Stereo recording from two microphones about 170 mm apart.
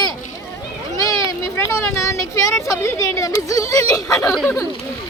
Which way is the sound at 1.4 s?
15° left (ahead or behind).